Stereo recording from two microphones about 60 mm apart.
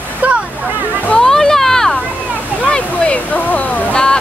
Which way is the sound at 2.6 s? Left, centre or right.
Left.